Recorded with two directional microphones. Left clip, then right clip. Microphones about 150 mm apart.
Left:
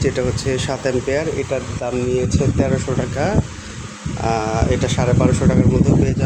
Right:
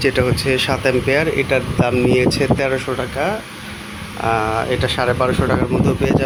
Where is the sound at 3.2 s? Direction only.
35° left (ahead or behind).